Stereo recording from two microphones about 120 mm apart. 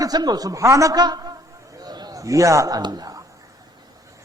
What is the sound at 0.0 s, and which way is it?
A man's voice, 35° right (ahead or behind).